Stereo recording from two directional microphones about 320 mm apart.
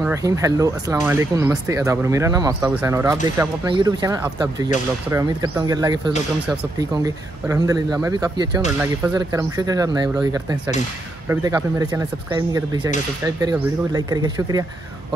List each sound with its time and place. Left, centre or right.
0.0 s speech: centre